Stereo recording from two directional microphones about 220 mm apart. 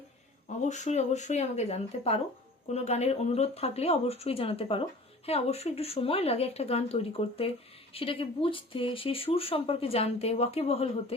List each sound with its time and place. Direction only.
0.6 s speech: 30° left (ahead or behind)